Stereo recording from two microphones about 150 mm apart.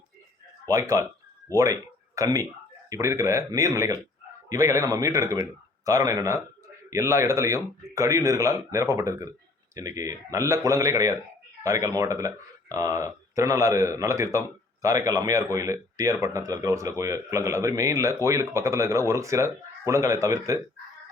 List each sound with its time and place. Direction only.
0.7 s speech: 25° right (ahead or behind)